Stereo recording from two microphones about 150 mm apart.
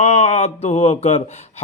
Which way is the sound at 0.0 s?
45° left (ahead or behind).